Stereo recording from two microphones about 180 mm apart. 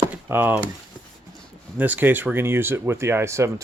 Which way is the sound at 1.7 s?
10° right (ahead or behind).